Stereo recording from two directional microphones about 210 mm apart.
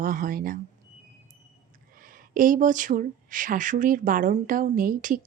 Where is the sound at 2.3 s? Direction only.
40° right (ahead or behind).